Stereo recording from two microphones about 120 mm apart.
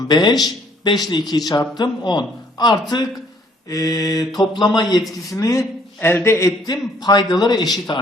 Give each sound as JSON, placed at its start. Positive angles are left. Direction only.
{"t": 0.1, "sound": "a man's voice", "side_deg": 35}
{"t": 5.4, "sound": "a man's voice", "side_deg": 25}
{"t": 6.7, "sound": "a man's voice", "side_deg": 35}